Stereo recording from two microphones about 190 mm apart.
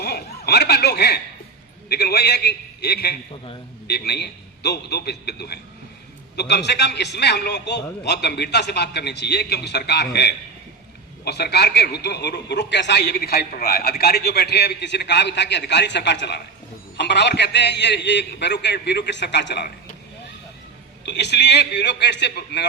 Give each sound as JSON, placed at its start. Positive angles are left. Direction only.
{"t": 0.0, "sound": "a man's voice", "side_deg": 60}
{"t": 21.0, "sound": "a man's voice", "side_deg": 65}